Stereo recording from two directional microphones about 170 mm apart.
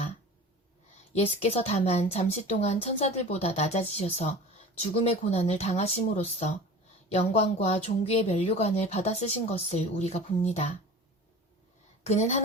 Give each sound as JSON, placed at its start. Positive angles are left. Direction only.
{"t": 1.1, "sound": "speech", "side_deg": 35}
{"t": 12.0, "sound": "speech", "side_deg": 40}